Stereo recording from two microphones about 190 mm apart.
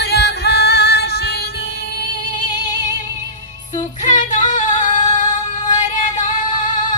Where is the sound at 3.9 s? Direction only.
40° left (ahead or behind).